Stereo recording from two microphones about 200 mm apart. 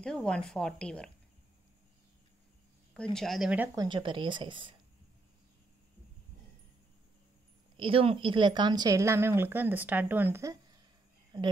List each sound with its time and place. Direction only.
0.0 s a woman's voice: 5° left (ahead or behind)
2.9 s speech: 5° left (ahead or behind); by 4.7 s 25° right (ahead or behind)
7.7 s speech: 25° right (ahead or behind)